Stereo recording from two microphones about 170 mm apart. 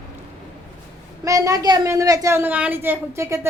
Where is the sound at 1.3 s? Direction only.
20° right (ahead or behind).